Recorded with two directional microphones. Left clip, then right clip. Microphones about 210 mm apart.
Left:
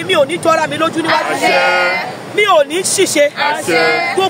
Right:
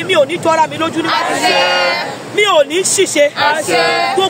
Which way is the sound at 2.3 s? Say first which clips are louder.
Even; centre (ahead or behind).